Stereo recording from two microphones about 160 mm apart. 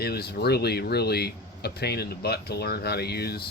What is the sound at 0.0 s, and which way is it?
Speech, 80° left.